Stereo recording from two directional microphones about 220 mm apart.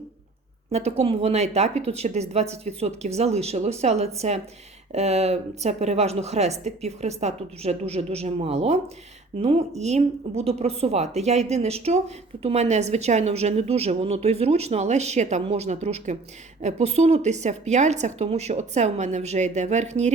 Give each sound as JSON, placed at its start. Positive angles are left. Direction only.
{"t": 0.7, "sound": "a woman's voice", "side_deg": -30}